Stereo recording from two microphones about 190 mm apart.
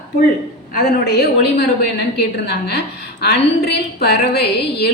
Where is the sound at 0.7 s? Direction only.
55° left (ahead or behind).